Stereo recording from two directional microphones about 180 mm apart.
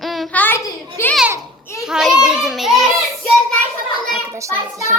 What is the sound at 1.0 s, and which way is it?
Child singing, 15° left (ahead or behind).